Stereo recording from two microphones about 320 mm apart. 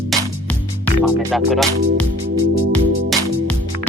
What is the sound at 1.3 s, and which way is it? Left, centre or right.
Speech, centre.